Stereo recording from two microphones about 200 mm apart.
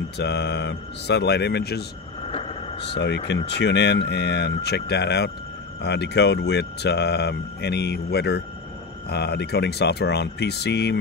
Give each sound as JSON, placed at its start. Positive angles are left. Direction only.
{"t": 0.2, "sound": "speech", "side_deg": 60}
{"t": 2.2, "sound": "a sound", "side_deg": 30}
{"t": 2.9, "sound": "speech", "side_deg": 60}